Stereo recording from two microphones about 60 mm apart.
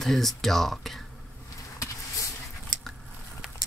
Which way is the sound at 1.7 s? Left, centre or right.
Left.